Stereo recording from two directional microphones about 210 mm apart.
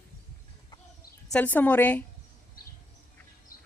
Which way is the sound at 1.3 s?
10° left (ahead or behind).